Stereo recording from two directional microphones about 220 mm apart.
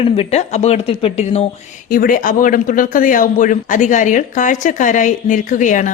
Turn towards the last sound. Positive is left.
turn(degrees=35)  # may be behind; listen again after turning